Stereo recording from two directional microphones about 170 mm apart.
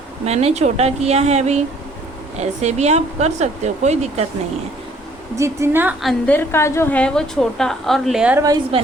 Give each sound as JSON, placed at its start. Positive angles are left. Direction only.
{"t": 0.3, "sound": "speech", "side_deg": -40}
{"t": 5.4, "sound": "a woman's voice", "side_deg": -15}
{"t": 6.0, "sound": "a woman's voice", "side_deg": 5}
{"t": 8.7, "sound": "speech", "side_deg": -35}